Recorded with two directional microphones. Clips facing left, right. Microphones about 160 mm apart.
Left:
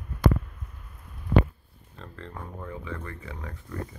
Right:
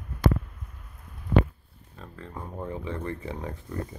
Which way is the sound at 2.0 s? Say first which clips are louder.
Even; 5° right (ahead or behind).